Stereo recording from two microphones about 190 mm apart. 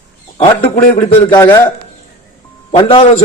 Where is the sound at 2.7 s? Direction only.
25° left (ahead or behind).